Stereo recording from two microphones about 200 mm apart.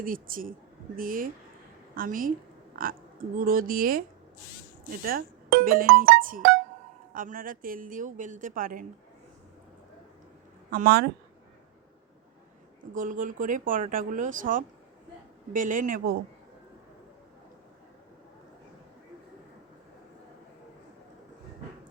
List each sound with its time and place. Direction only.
0.0 s a woman's voice: 45° right (ahead or behind)
5.0 s a woman's voice: 45° right (ahead or behind)
10.7 s a woman's voice: 50° right (ahead or behind)
12.9 s a woman's voice: 40° right (ahead or behind)